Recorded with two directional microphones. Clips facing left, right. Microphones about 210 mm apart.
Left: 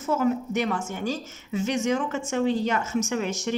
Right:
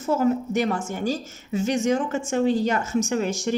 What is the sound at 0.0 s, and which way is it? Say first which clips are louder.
A woman's voice: right 2 dB; 35° right (ahead or behind).